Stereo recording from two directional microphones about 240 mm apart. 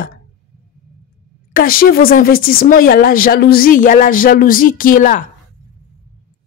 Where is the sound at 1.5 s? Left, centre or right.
Left.